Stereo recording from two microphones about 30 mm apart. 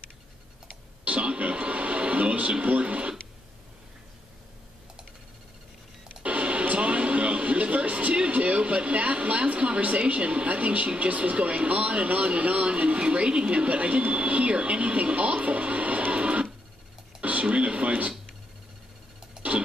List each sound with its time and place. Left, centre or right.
1.0 s television: right
2.6 s speech: right
6.2 s music: right
8.3 s a sound: right
11.0 s speech: right
13.7 s speech: right
15.4 s music: right
17.2 s a sound: right
19.4 s a sound: right